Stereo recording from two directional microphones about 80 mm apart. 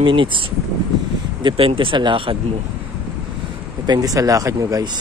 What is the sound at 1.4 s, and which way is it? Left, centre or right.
Speech, right.